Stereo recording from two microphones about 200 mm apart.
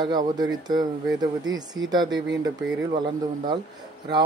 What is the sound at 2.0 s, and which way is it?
Speech, 65° right (ahead or behind).